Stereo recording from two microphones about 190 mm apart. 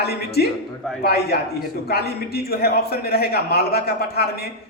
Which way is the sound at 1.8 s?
55° left (ahead or behind).